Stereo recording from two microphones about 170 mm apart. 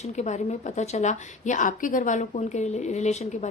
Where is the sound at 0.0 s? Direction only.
40° left (ahead or behind).